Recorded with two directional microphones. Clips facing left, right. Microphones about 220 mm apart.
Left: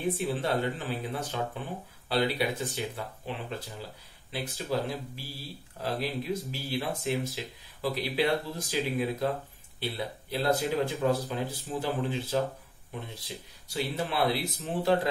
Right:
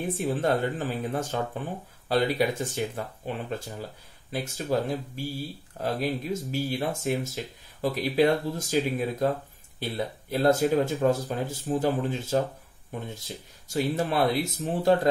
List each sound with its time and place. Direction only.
0.1 s speech: 45° right (ahead or behind)
13.7 s speech: 45° right (ahead or behind)